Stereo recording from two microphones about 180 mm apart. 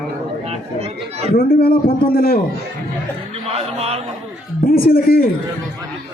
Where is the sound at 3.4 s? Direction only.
35° right (ahead or behind).